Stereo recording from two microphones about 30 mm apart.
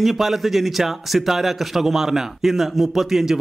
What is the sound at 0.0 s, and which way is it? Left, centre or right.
Speech, centre.